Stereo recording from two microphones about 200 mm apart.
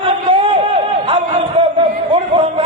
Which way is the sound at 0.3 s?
25° right (ahead or behind).